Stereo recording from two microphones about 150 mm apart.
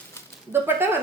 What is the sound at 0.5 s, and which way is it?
Speech, 15° right (ahead or behind).